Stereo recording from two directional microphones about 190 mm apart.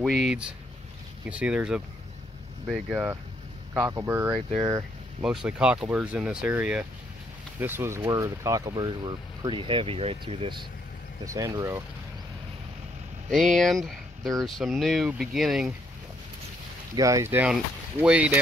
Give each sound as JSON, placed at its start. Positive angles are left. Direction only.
{"t": 0.0, "sound": "speech", "side_deg": 0}
{"t": 13.3, "sound": "speech", "side_deg": 0}
{"t": 16.9, "sound": "speech", "side_deg": -15}